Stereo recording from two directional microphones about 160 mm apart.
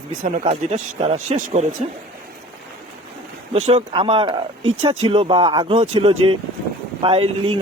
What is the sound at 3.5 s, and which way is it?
A man's voice, 35° right (ahead or behind).